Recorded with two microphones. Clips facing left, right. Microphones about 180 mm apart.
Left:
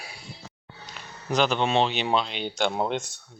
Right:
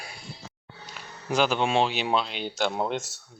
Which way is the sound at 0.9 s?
10° right (ahead or behind).